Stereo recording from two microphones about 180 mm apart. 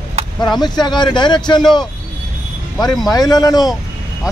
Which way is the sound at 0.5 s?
25° left (ahead or behind).